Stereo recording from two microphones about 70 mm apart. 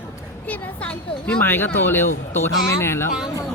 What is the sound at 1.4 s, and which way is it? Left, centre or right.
Speech, left.